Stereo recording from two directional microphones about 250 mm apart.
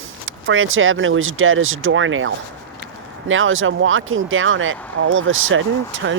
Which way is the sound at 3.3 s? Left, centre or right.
Right.